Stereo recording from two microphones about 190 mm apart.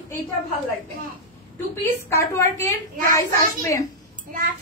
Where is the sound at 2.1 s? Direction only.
15° left (ahead or behind).